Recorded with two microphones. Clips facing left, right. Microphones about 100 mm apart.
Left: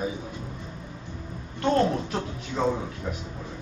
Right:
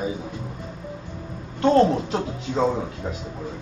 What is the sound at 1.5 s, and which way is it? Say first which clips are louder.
A woman's voice: right 6 dB; 25° right (ahead or behind).